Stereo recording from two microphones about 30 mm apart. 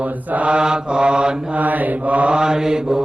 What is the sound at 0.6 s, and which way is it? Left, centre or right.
Mantra, right.